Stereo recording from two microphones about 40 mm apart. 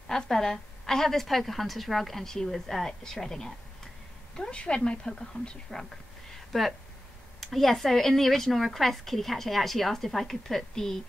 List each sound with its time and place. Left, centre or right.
0.1 s a woman's voice: centre
4.4 s a woman's voice: left
6.5 s speech: centre